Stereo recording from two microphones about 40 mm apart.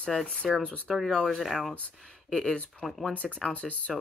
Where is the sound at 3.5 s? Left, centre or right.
Left.